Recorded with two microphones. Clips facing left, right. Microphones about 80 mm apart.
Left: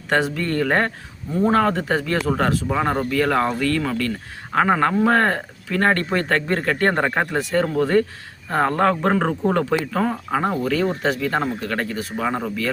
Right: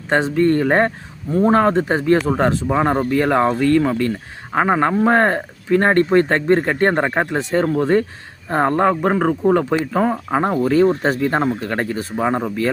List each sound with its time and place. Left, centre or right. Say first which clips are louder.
0.1 s speech: right 5 dB; right
8.9 s speech: right 3 dB; centre; by 12.4 s right